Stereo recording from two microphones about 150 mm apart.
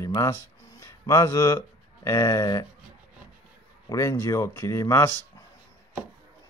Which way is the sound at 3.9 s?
20° left (ahead or behind).